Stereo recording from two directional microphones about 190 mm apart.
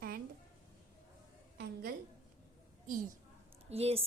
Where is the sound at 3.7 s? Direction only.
35° right (ahead or behind).